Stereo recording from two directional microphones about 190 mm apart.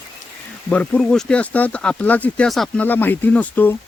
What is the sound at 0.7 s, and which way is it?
Speech, 5° left (ahead or behind).